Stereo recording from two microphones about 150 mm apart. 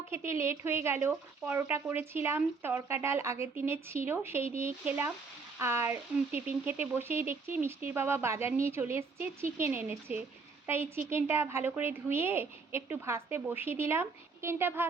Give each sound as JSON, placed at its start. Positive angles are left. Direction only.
{"t": 0.1, "sound": "speech", "side_deg": -15}